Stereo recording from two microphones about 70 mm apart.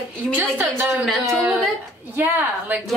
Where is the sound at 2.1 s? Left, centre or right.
Right.